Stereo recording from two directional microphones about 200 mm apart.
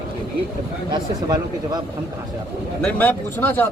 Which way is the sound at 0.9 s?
20° right (ahead or behind).